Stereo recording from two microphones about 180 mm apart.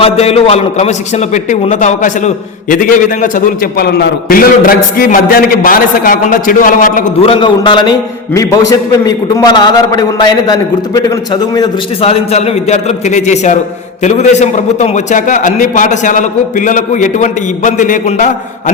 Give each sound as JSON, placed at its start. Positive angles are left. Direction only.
{"t": 0.0, "sound": "a man's voice", "side_deg": 35}
{"t": 7.2, "sound": "a man's voice", "side_deg": 30}
{"t": 12.0, "sound": "a man's voice", "side_deg": 35}